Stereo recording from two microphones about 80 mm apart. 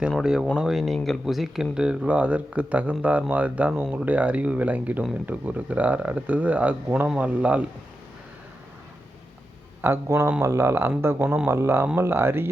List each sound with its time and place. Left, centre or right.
0.2 s speech: centre
9.8 s speech: right
11.2 s speech: centre
11.4 s speech: right